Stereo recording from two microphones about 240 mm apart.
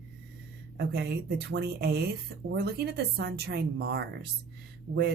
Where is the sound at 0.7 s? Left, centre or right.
Right.